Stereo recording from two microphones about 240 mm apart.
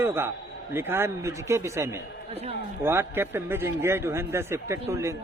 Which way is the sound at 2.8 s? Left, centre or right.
Centre.